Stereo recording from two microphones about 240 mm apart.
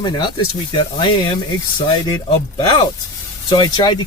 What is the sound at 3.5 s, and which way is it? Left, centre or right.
Speech, centre.